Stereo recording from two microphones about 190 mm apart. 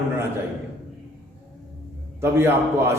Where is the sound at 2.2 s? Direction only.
15° right (ahead or behind).